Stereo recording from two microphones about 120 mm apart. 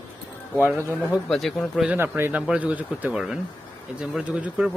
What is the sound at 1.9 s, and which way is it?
Speech, 15° right (ahead or behind).